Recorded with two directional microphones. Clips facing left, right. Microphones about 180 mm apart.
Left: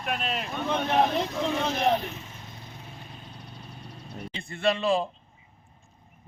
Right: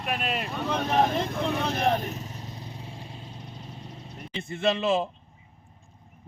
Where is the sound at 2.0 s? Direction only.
40° right (ahead or behind).